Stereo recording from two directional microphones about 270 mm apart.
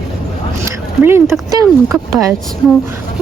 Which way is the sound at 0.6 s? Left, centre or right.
Centre.